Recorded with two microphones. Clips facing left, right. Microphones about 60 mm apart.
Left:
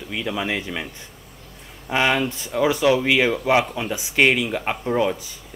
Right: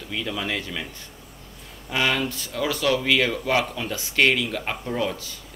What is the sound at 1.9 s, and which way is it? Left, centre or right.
Speech, left.